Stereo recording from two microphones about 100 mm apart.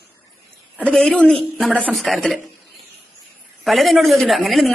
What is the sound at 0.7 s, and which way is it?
A woman's voice, 5° left (ahead or behind).